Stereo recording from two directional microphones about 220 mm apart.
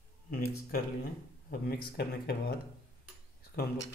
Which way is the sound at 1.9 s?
45° left (ahead or behind).